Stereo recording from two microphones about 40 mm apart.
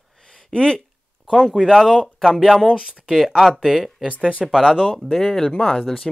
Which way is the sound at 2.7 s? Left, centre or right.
Centre.